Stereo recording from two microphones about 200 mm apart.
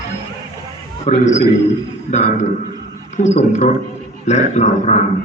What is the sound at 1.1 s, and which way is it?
A man's voice, 35° left (ahead or behind).